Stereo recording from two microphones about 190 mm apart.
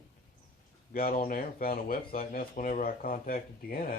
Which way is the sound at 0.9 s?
50° left (ahead or behind).